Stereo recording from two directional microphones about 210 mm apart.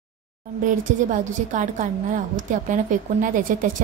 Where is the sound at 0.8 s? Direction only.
35° right (ahead or behind).